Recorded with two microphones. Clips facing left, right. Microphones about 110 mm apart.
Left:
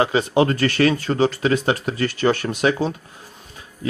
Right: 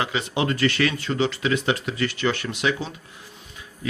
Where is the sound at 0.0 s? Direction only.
40° left (ahead or behind).